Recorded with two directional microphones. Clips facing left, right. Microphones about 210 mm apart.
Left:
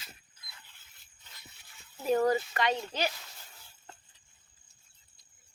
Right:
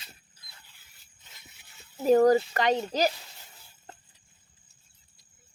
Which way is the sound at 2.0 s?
40° right (ahead or behind).